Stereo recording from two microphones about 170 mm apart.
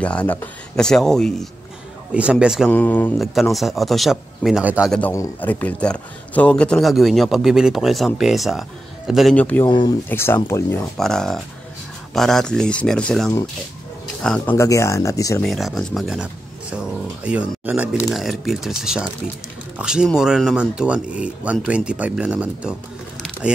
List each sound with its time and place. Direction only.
0.0 s speech: 10° left (ahead or behind)
2.7 s speech: 10° left (ahead or behind)
3.5 s speech: centre (ahead or behind)
5.1 s speech: 15° left (ahead or behind)
9.7 s speech: 30° left (ahead or behind)
10.0 s speech: 10° left (ahead or behind)
11.0 s speech: 5° left (ahead or behind); by 15.4 s 20° left (ahead or behind)
15.4 s speech: centre (ahead or behind)